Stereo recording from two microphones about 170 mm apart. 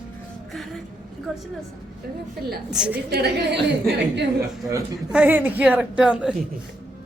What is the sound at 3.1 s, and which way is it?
A woman's voice, 75° right (ahead or behind).